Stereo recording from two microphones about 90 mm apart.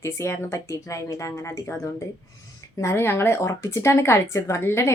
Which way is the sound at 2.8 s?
30° left (ahead or behind).